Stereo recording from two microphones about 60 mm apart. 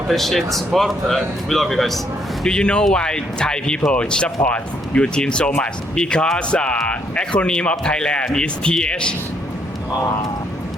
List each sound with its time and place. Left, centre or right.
0.1 s speech: centre
2.4 s speech: centre